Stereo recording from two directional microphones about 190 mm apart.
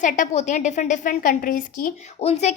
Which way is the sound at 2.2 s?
35° left (ahead or behind).